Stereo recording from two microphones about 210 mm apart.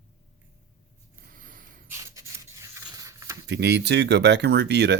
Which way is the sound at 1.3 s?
40° right (ahead or behind).